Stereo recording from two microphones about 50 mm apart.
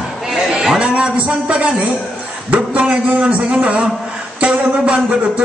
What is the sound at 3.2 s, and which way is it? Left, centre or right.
A man's voice, right.